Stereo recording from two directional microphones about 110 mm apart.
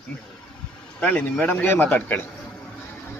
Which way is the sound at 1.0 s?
15° left (ahead or behind).